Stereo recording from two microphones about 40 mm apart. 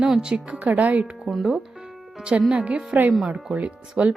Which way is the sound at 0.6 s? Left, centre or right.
Right.